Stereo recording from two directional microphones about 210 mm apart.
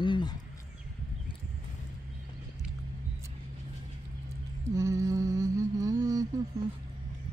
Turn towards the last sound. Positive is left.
turn(degrees=-15)  # may be behind; listen again after turning